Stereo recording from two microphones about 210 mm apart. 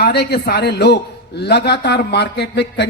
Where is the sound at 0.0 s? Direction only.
50° left (ahead or behind).